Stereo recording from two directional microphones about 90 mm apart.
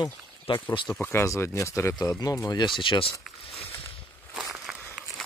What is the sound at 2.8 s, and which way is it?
Speech, 75° left (ahead or behind).